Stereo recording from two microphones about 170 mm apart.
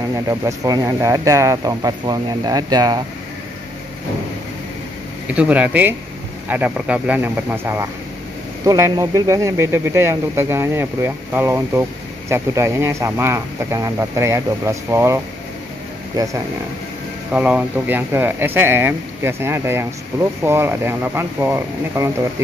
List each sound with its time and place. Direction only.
0.1 s speech: 20° right (ahead or behind)
5.3 s speech: 10° right (ahead or behind)
17.3 s speech: 10° right (ahead or behind)